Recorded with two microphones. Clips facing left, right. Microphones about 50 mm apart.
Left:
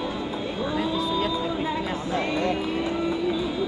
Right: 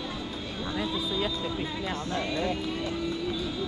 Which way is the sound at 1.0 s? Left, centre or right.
Centre.